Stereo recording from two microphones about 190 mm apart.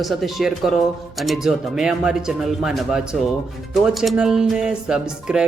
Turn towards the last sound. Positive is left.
turn(degrees=-5)  # may be behind; listen again after turning